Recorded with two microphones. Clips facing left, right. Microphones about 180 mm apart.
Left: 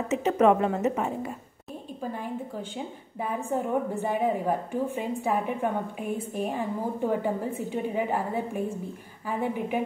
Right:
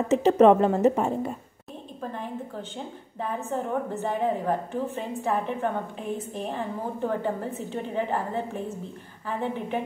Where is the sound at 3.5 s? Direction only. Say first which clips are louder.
Left 2 dB; 10° left (ahead or behind).